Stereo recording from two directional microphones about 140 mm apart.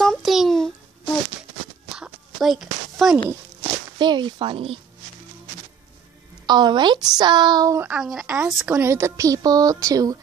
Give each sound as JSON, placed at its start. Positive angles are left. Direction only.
{"t": 0.0, "sound": "babbling", "side_deg": 0}
{"t": 2.0, "sound": "a sound", "side_deg": 0}
{"t": 4.0, "sound": "speech", "side_deg": -35}
{"t": 6.4, "sound": "speech", "side_deg": -30}
{"t": 7.9, "sound": "speech", "side_deg": -5}
{"t": 8.7, "sound": "speech", "side_deg": -20}